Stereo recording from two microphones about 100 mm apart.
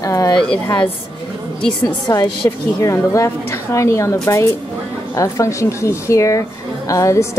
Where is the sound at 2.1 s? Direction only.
30° left (ahead or behind).